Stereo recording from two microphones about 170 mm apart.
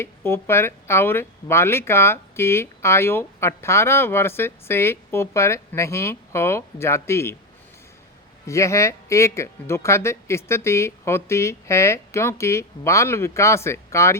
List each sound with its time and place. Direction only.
0.0 s speech: 15° left (ahead or behind)
8.4 s speech: 15° left (ahead or behind)